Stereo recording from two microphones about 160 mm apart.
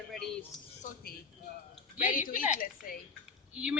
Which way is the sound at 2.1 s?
60° left (ahead or behind).